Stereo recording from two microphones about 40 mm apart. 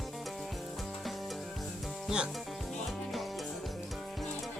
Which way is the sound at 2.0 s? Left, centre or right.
Right.